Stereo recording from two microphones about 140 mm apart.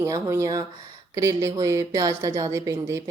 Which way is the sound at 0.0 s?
20° right (ahead or behind).